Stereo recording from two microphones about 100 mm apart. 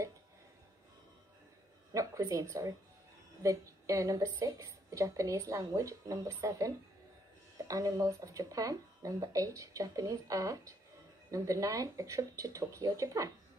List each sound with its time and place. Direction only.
2.0 s a woman's voice: 35° right (ahead or behind)